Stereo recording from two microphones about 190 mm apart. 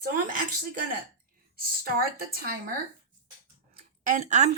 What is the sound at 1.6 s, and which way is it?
Speech, 50° right (ahead or behind).